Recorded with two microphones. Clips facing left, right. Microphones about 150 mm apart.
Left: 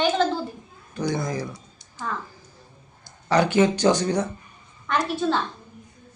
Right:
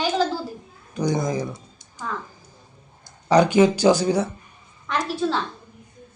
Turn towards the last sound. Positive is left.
turn(degrees=0)  # may be behind; listen again after turning